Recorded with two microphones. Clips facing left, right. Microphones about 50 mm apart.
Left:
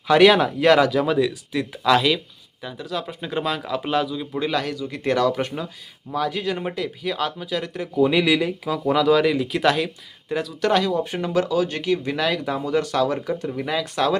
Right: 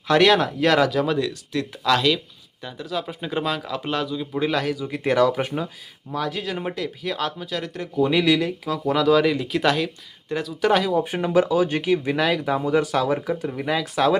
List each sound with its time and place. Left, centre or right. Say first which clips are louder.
0.1 s speech: left 2 dB; centre
6.1 s speech: left 3 dB; centre